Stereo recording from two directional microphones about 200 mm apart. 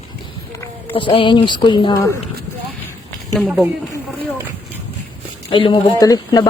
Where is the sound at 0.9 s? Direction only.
25° left (ahead or behind).